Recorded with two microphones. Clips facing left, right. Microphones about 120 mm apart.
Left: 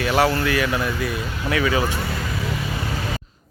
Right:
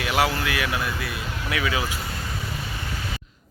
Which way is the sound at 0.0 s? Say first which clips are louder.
Left 4 dB; 5° right (ahead or behind).